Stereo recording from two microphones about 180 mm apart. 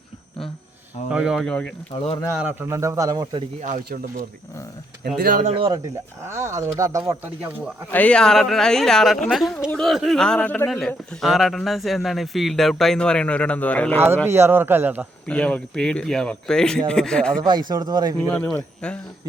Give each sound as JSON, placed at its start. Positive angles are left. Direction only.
{"t": 1.1, "sound": "speech", "side_deg": -5}
{"t": 1.9, "sound": "speech", "side_deg": 30}
{"t": 2.4, "sound": "speech", "side_deg": -15}
{"t": 3.6, "sound": "speech", "side_deg": -50}
{"t": 6.2, "sound": "speech", "side_deg": -15}
{"t": 7.9, "sound": "speech", "side_deg": 10}
{"t": 14.3, "sound": "speech", "side_deg": -15}
{"t": 15.3, "sound": "speech", "side_deg": 5}
{"t": 17.7, "sound": "speech", "side_deg": -25}
{"t": 18.2, "sound": "speech", "side_deg": 5}